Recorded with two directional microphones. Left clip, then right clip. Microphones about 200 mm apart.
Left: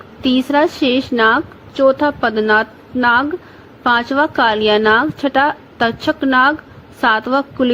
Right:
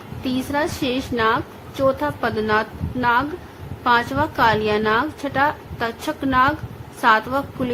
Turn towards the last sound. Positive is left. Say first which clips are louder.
# left 7 dB
turn(degrees=30)  # may be behind; listen again after turning